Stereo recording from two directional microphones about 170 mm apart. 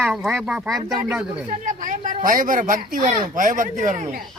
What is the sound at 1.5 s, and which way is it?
Chatter, 50° right (ahead or behind).